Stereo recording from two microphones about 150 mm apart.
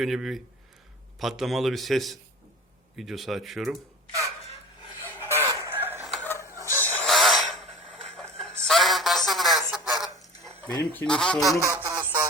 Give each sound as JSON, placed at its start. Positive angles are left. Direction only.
{"t": 0.0, "sound": "a man's voice", "side_deg": 0}
{"t": 5.2, "sound": "chicken", "side_deg": -15}
{"t": 6.6, "sound": "a sound", "side_deg": 15}
{"t": 8.1, "sound": "music", "side_deg": 0}
{"t": 8.6, "sound": "a sound", "side_deg": 0}
{"t": 10.4, "sound": "speech", "side_deg": 5}
{"t": 11.6, "sound": "music", "side_deg": -20}